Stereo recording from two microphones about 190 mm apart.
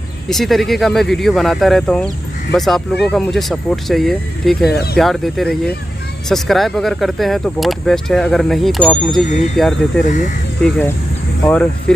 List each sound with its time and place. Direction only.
0.3 s speech: centre (ahead or behind)
10.0 s speech: 40° left (ahead or behind)
11.4 s speech: 5° left (ahead or behind)